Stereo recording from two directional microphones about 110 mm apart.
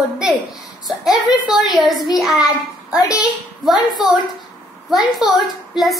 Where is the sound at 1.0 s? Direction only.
35° left (ahead or behind).